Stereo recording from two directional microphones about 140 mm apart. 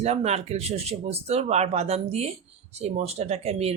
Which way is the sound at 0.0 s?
50° right (ahead or behind).